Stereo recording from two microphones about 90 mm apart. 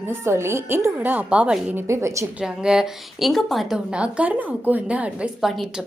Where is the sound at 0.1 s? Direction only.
30° right (ahead or behind).